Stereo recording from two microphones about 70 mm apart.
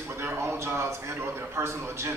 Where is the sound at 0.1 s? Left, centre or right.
Right.